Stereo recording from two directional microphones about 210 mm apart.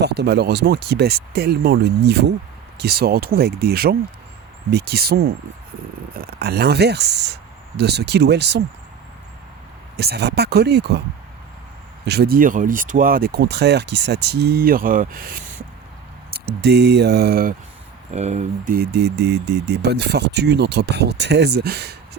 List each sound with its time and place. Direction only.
0.0 s speech: 50° right (ahead or behind)
10.0 s speech: 50° right (ahead or behind)
12.0 s speech: 50° right (ahead or behind)
18.1 s speech: 35° right (ahead or behind); by 21.9 s 50° right (ahead or behind)